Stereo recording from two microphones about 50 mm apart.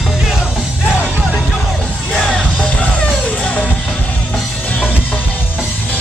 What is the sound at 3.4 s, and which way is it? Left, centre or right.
Music, left.